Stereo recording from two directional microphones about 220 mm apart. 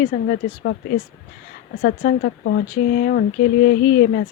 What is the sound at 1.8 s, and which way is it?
Speech, 50° left (ahead or behind).